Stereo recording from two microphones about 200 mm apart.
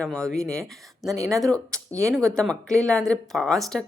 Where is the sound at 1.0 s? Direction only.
15° right (ahead or behind).